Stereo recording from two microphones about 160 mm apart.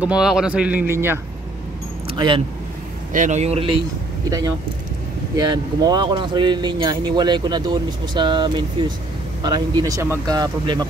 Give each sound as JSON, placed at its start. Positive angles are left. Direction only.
{"t": 0.0, "sound": "speech", "side_deg": -5}
{"t": 2.1, "sound": "speech", "side_deg": -30}
{"t": 3.1, "sound": "speech", "side_deg": -50}
{"t": 5.3, "sound": "speech", "side_deg": -25}